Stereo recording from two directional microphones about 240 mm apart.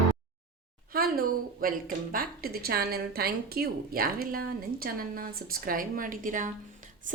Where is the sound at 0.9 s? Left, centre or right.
Right.